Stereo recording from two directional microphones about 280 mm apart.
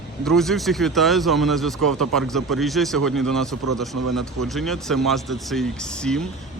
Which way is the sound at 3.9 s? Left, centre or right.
Right.